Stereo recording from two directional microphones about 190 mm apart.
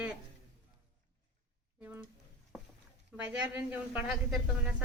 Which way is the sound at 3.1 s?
5° right (ahead or behind).